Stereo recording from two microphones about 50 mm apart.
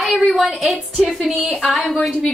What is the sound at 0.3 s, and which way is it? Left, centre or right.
A woman's voice, centre.